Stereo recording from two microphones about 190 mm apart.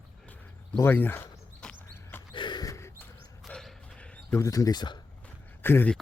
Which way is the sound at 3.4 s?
Centre (ahead or behind).